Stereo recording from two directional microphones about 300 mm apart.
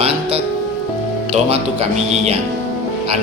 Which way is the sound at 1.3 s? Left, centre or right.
Centre.